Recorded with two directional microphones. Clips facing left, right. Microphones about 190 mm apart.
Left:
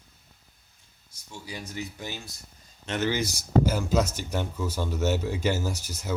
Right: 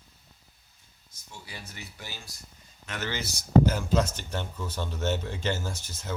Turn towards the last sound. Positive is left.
turn(degrees=10)  # may be behind; listen again after turning